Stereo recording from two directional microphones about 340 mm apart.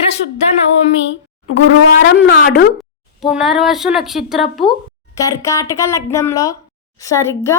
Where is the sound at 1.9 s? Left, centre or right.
Left.